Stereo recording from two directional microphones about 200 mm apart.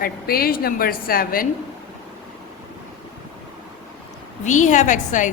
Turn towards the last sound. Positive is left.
turn(degrees=40)  # may be behind; listen again after turning